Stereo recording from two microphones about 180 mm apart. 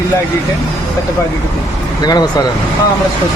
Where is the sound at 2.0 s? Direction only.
20° left (ahead or behind).